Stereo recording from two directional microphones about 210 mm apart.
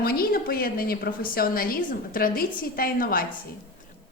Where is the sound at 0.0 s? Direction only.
45° left (ahead or behind).